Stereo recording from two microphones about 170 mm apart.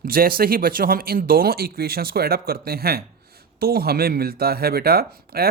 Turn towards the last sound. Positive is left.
turn(degrees=-65)  # may be behind; listen again after turning